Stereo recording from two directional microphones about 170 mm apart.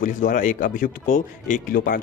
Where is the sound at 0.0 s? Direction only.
50° left (ahead or behind).